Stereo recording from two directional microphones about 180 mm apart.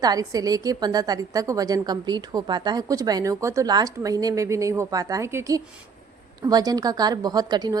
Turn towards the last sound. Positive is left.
turn(degrees=-20)  # may be behind; listen again after turning